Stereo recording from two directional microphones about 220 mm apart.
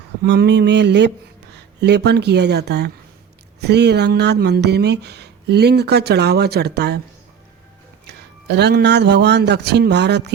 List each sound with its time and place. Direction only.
0.2 s speech: 50° right (ahead or behind)
8.0 s a man's voice: 50° right (ahead or behind)